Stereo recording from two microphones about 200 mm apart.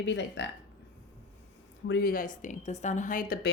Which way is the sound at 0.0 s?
65° left (ahead or behind).